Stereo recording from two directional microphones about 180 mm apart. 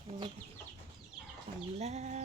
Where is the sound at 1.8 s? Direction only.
40° right (ahead or behind).